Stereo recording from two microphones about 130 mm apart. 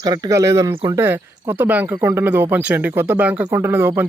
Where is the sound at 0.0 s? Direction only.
30° right (ahead or behind).